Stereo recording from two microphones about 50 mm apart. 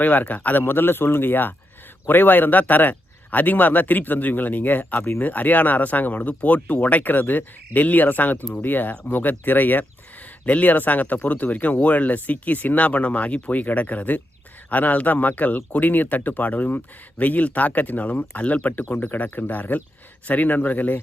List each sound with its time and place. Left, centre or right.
0.0 s speech: left
0.6 s speech: left